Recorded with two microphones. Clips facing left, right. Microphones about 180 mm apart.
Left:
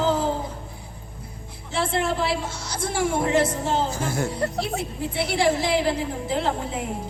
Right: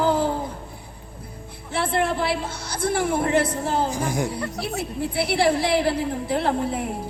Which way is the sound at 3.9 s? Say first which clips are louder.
Right 1 dB; 15° right (ahead or behind).